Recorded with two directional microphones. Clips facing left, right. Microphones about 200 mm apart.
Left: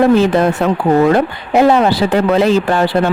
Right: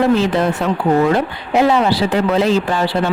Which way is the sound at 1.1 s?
55° left (ahead or behind).